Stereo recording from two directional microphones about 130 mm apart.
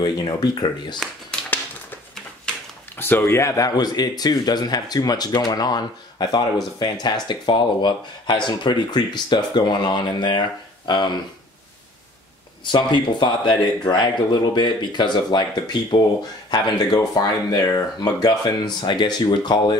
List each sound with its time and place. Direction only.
0.0 s speech: 35° left (ahead or behind)
3.0 s speech: 15° left (ahead or behind); by 10.4 s 35° left (ahead or behind)
12.6 s speech: 35° left (ahead or behind)